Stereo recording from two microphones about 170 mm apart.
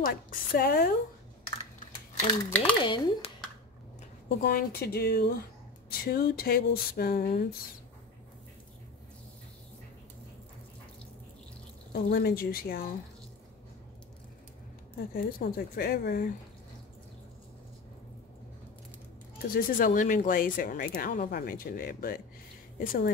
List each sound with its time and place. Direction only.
0.0 s speech: 60° left (ahead or behind)
2.8 s speech: 30° left (ahead or behind)
4.4 s speech: 60° left (ahead or behind)
11.9 s speech: 60° left (ahead or behind)
15.0 s speech: 60° left (ahead or behind)
19.3 s speech: 60° left (ahead or behind)